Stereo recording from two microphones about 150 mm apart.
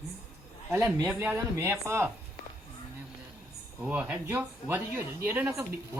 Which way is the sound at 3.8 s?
10° right (ahead or behind).